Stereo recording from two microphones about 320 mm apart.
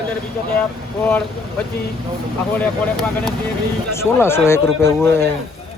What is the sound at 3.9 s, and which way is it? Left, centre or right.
Speech, centre.